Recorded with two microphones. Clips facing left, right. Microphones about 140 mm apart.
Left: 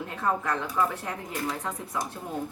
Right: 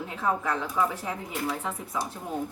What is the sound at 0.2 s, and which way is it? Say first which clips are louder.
Speech: even; 10° right (ahead or behind).